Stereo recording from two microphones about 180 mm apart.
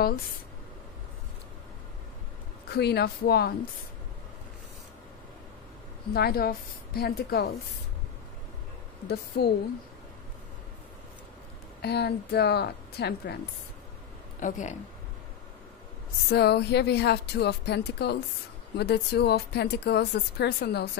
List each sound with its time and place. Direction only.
2.7 s speech: 65° left (ahead or behind)
6.1 s speech: 60° left (ahead or behind)
9.0 s speech: 65° left (ahead or behind)
11.8 s speech: 65° left (ahead or behind)
14.4 s speech: 45° left (ahead or behind)
16.3 s speech: 65° left (ahead or behind)